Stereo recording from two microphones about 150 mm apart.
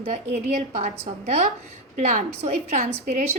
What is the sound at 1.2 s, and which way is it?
A woman's voice, 50° right (ahead or behind).